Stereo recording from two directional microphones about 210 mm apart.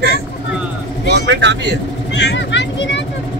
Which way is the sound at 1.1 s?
55° right (ahead or behind).